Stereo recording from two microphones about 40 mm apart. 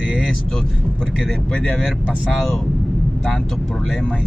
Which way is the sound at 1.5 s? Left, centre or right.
Left.